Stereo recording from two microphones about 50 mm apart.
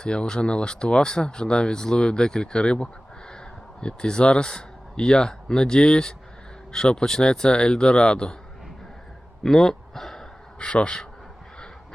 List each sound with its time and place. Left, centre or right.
0.0 s speech: centre
9.4 s a sound: centre
10.6 s speech: left